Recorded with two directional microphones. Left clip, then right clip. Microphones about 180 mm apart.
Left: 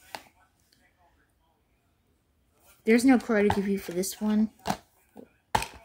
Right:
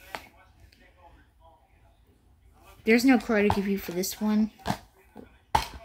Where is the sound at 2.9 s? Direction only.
20° left (ahead or behind).